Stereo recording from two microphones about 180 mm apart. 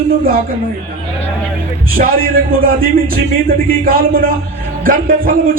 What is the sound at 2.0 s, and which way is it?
Speech, 50° right (ahead or behind).